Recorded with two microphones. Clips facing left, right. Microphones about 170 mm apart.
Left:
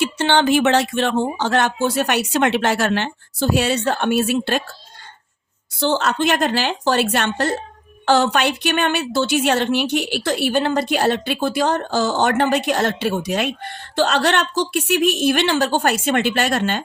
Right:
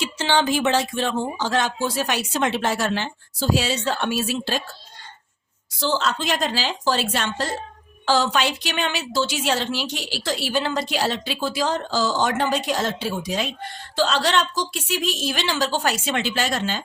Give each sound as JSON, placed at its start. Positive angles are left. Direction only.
{"t": 0.0, "sound": "a woman's voice", "side_deg": 60}
{"t": 5.8, "sound": "a woman's voice", "side_deg": 60}